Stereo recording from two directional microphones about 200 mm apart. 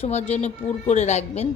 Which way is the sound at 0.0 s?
35° left (ahead or behind).